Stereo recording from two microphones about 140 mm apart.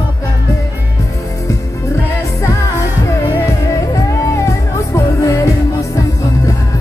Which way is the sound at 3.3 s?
20° left (ahead or behind).